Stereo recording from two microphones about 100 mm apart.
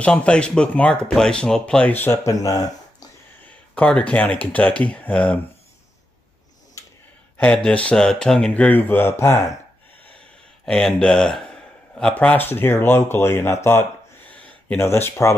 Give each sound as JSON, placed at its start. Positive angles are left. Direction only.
{"t": 0.0, "sound": "speech", "side_deg": 10}
{"t": 2.2, "sound": "speech", "side_deg": 35}
{"t": 3.4, "sound": "speech", "side_deg": 15}
{"t": 6.8, "sound": "a sound", "side_deg": 30}
{"t": 7.5, "sound": "speech", "side_deg": 10}
{"t": 10.6, "sound": "speech", "side_deg": 5}
{"t": 14.3, "sound": "a sound", "side_deg": 15}
{"t": 14.8, "sound": "speech", "side_deg": 25}